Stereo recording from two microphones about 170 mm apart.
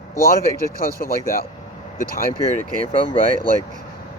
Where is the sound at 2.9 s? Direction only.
30° left (ahead or behind).